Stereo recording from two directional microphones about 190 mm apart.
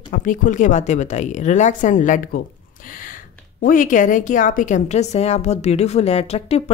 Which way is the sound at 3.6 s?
45° left (ahead or behind).